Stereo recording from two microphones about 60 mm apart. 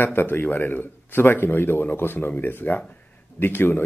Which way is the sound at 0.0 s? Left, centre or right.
Left.